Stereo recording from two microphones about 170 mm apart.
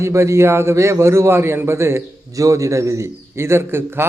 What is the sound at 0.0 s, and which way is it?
A man's voice, 15° right (ahead or behind).